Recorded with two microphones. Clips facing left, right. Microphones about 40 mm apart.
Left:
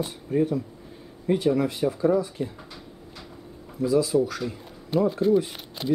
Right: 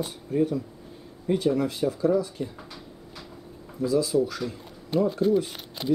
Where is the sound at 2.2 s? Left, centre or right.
Centre.